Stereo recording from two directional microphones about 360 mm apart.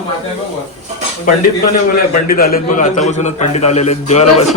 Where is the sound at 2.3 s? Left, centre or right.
Left.